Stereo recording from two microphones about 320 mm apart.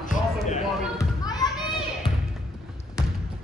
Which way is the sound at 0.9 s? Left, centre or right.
Centre.